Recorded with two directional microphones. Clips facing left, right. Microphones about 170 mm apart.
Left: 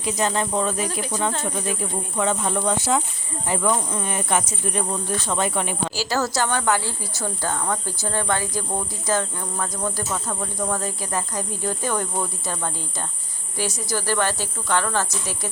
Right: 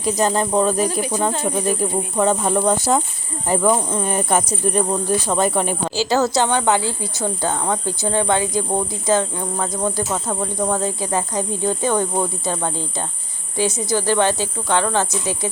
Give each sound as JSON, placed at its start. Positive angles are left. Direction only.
{"t": 0.0, "sound": "speech", "side_deg": -40}
{"t": 5.9, "sound": "speech", "side_deg": -25}